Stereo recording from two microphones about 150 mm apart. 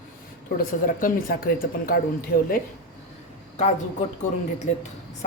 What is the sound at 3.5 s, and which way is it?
Speech, 50° left (ahead or behind).